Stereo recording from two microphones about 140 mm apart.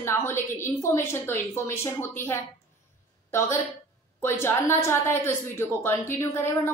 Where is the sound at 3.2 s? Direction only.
20° left (ahead or behind).